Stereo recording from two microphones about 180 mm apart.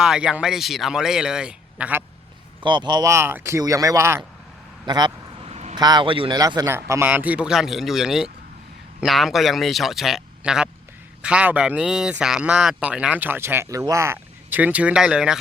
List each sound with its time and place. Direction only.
0.0 s speech: 5° right (ahead or behind)
2.6 s speech: 25° right (ahead or behind)
4.9 s vehicle: 25° right (ahead or behind)
5.7 s speech: 25° right (ahead or behind); by 15.4 s 5° right (ahead or behind)